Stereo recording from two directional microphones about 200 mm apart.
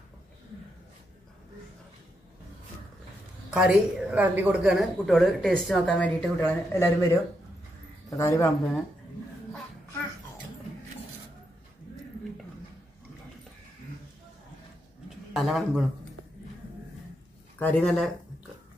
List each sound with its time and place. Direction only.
3.4 s a man's voice: 5° right (ahead or behind); by 8.5 s 15° left (ahead or behind)
15.0 s a sound: centre (ahead or behind)
17.6 s speech: 5° left (ahead or behind)